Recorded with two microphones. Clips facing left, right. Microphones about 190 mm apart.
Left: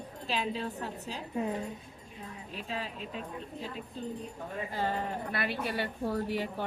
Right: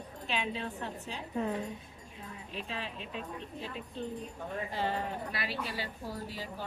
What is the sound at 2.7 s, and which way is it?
Speech, 40° left (ahead or behind).